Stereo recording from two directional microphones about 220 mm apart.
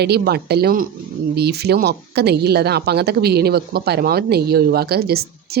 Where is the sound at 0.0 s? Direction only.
45° right (ahead or behind).